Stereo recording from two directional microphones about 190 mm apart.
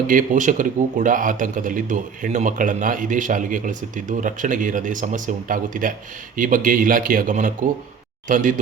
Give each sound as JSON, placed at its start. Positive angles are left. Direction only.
{"t": 0.1, "sound": "speech", "side_deg": -45}